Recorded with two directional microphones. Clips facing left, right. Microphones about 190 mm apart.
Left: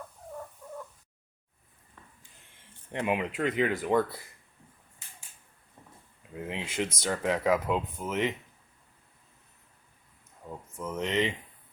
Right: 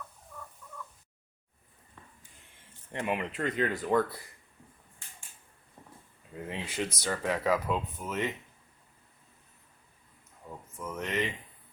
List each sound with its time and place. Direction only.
2.9 s speech: 15° left (ahead or behind)
6.3 s speech: 20° left (ahead or behind)
10.4 s a sound: 10° left (ahead or behind)
10.8 s speech: 20° left (ahead or behind)